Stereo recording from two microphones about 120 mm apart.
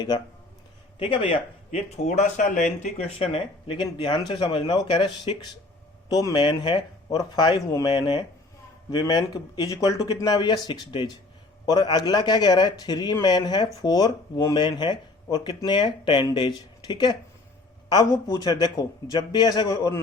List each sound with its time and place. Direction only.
0.9 s speech: 50° left (ahead or behind)
2.0 s speech: 85° left; by 5.3 s 40° left (ahead or behind)
6.1 s speech: 30° left (ahead or behind)
17.8 s speech: 30° left (ahead or behind)